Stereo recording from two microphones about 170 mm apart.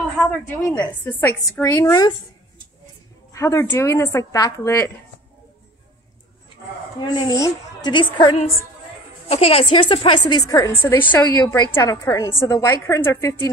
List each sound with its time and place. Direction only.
0.2 s a woman's voice: 10° left (ahead or behind)
3.3 s a woman's voice: 15° left (ahead or behind)
7.0 s a woman's voice: 20° left (ahead or behind)